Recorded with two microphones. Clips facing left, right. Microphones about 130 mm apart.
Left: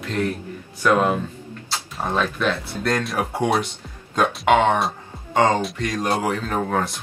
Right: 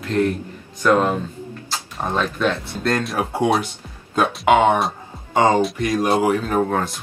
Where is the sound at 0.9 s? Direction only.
10° left (ahead or behind).